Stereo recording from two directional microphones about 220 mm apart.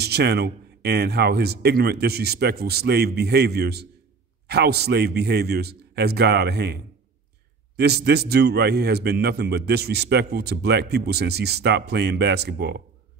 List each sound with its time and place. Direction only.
0.0 s a man's voice: 45° right (ahead or behind)